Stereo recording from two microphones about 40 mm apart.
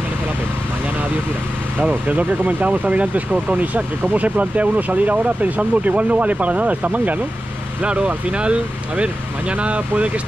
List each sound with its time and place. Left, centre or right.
2.0 s speech: right
7.8 s speech: right